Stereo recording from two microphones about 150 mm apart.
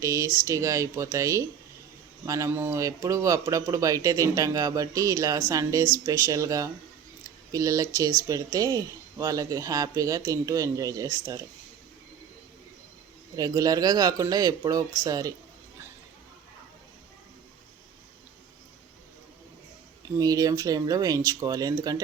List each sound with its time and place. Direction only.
0.0 s speech: 20° right (ahead or behind)
13.3 s speech: 25° right (ahead or behind)
20.1 s speech: 25° right (ahead or behind)